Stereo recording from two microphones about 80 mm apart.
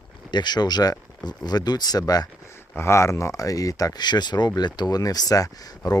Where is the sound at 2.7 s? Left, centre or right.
Left.